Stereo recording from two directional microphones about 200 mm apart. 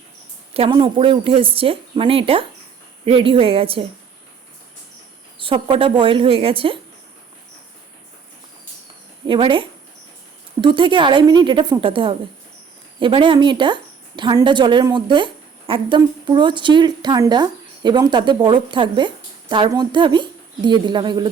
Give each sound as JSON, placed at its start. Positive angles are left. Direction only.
{"t": 0.5, "sound": "a woman's voice", "side_deg": -25}
{"t": 5.4, "sound": "a woman's voice", "side_deg": -25}
{"t": 9.2, "sound": "a woman's voice", "side_deg": -25}